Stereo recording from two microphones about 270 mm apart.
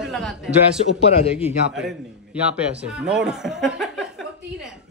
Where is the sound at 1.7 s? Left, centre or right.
Centre.